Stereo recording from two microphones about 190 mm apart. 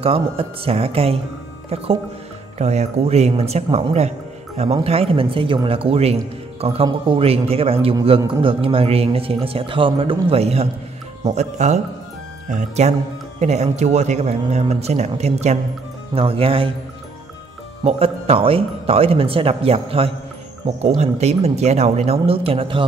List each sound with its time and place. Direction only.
0.0 s speech: 30° right (ahead or behind)
17.8 s speech: 30° right (ahead or behind)